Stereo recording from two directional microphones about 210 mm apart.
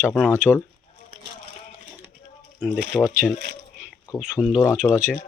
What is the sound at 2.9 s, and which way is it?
Speech, 10° left (ahead or behind).